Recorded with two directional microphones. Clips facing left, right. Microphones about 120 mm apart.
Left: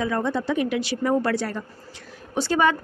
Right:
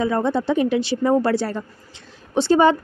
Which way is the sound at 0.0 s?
30° right (ahead or behind).